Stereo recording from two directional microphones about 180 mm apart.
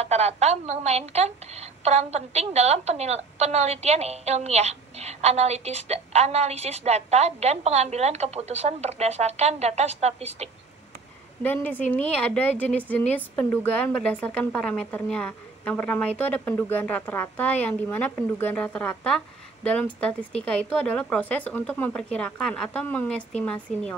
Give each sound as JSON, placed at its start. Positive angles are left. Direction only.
{"t": 0.0, "sound": "a woman's voice", "side_deg": -35}
{"t": 11.4, "sound": "speech", "side_deg": 10}